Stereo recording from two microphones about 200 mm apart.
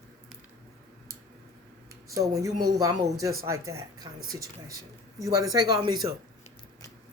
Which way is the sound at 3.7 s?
15° right (ahead or behind).